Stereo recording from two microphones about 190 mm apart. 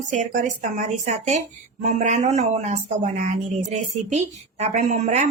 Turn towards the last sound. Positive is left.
turn(degrees=-35)  # may be behind; listen again after turning